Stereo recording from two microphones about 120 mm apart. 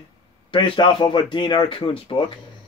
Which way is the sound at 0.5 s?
40° left (ahead or behind).